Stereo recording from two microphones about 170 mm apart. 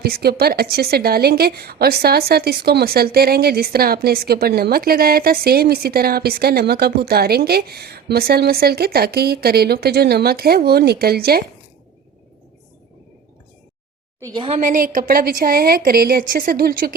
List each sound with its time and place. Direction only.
0.0 s a woman's voice: 65° right (ahead or behind)
14.5 s a woman's voice: 50° right (ahead or behind)